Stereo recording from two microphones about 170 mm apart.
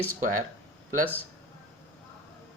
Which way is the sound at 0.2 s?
50° right (ahead or behind).